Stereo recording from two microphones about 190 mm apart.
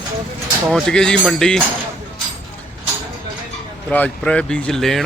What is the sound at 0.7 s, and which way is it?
Speech, 5° left (ahead or behind).